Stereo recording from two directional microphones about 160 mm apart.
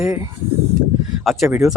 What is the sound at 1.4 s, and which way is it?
Speech, 15° right (ahead or behind).